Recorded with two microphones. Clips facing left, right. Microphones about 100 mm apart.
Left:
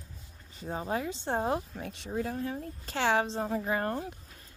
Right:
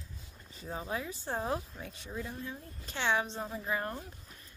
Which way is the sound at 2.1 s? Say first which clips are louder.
Left 8 dB; 55° left (ahead or behind).